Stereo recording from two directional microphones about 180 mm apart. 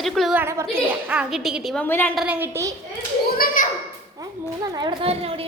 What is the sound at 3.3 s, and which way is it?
Clapping, 50° left (ahead or behind).